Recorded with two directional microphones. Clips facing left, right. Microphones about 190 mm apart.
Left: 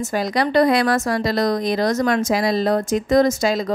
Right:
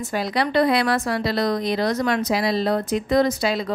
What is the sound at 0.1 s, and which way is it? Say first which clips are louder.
A woman's voice: left 2 dB; 45° left (ahead or behind).